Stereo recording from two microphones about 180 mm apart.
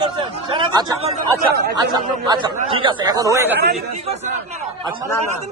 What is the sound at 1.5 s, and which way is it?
Speech, 60° right (ahead or behind).